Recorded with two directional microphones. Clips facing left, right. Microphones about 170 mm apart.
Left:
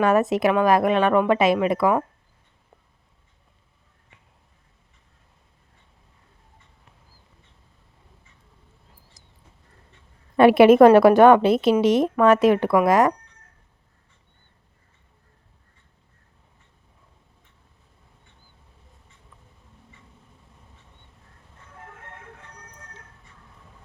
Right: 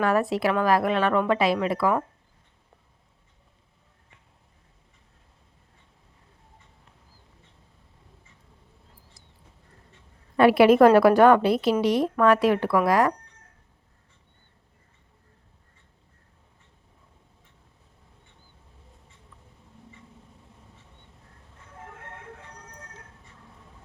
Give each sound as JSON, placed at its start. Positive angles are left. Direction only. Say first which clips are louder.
{"t": 0.0, "sound": "speech", "louder": "left 4 dB", "side_deg": 20}
{"t": 10.3, "sound": "speech", "louder": "left 4 dB", "side_deg": 20}